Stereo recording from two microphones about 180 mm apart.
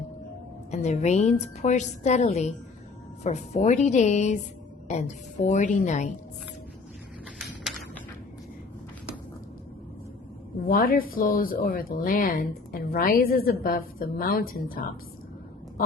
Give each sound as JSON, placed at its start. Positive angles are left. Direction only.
{"t": 0.7, "sound": "a woman's voice", "side_deg": 40}
{"t": 10.7, "sound": "a woman's voice", "side_deg": 55}